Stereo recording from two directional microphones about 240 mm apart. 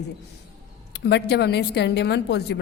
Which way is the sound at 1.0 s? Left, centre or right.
Left.